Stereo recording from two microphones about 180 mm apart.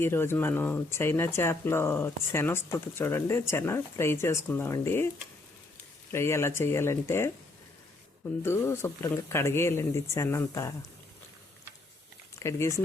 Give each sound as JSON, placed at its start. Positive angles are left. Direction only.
{"t": 0.0, "sound": "speech", "side_deg": 15}
{"t": 6.1, "sound": "speech", "side_deg": 15}
{"t": 8.4, "sound": "speech", "side_deg": 15}
{"t": 12.4, "sound": "speech", "side_deg": 15}